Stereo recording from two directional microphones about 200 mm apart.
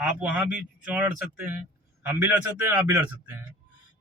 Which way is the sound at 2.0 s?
10° right (ahead or behind).